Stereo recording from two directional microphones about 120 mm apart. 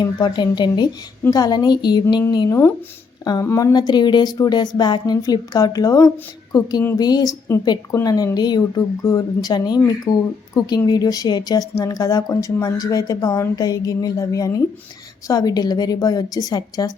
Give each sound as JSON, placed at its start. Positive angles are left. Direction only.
{"t": 0.0, "sound": "speech", "side_deg": 40}
{"t": 2.5, "sound": "a woman's voice", "side_deg": 20}